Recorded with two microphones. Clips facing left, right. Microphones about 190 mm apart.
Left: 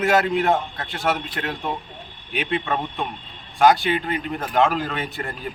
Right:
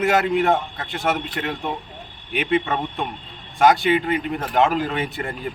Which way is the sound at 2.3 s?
20° right (ahead or behind).